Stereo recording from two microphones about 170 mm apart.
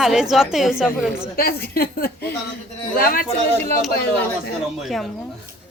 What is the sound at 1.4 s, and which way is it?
Speech, 65° left (ahead or behind).